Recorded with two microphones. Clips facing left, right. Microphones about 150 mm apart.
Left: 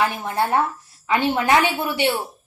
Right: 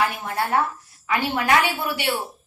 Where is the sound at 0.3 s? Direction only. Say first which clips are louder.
Left 2 dB; 25° left (ahead or behind).